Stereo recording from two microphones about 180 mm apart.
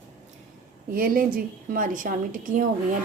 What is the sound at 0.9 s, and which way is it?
A woman's voice, 50° right (ahead or behind).